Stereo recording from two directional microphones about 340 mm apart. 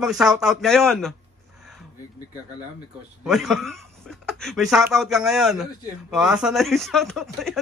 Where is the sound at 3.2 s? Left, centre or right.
Centre.